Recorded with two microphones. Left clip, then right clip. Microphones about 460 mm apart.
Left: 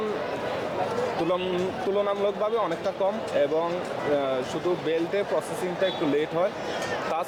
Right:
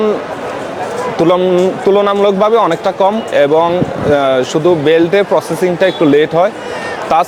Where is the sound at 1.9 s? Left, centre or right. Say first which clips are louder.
Right 15 dB; right.